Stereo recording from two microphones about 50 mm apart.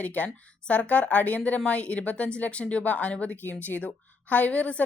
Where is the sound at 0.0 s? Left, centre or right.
Left.